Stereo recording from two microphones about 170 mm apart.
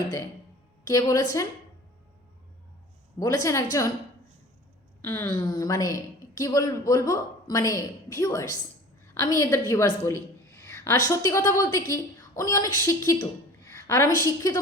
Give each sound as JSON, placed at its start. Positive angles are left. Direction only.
{"t": 0.9, "sound": "a woman's voice", "side_deg": 20}
{"t": 3.2, "sound": "a woman's voice", "side_deg": 20}
{"t": 5.0, "sound": "a woman's voice", "side_deg": 15}